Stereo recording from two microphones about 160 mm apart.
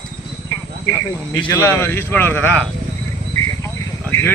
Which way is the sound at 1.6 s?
15° left (ahead or behind).